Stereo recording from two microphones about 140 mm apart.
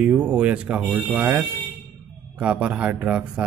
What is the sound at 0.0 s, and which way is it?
Speech, 10° right (ahead or behind).